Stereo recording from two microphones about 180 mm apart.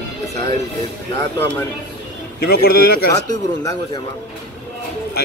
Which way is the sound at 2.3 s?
60° left (ahead or behind).